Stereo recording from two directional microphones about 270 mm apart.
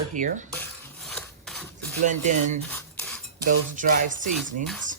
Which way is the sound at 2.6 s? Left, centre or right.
Centre.